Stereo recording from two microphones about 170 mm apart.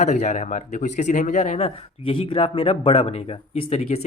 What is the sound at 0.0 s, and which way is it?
Speech, 45° left (ahead or behind).